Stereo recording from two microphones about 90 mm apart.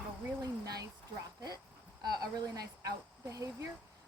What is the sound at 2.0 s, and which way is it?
Speech, 50° right (ahead or behind).